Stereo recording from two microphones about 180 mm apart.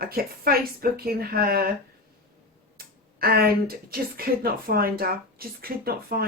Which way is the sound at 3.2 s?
55° right (ahead or behind).